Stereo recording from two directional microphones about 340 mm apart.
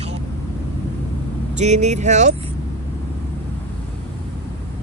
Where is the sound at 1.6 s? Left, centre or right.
Centre.